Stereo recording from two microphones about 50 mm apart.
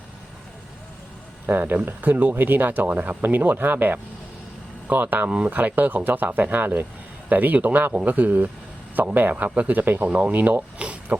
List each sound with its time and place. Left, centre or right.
1.5 s speech: right